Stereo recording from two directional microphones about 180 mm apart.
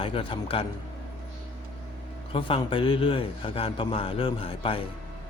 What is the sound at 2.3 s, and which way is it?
A man's voice, 30° left (ahead or behind).